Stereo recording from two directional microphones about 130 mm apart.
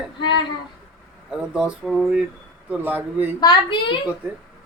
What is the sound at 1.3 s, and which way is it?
Speech, 5° right (ahead or behind).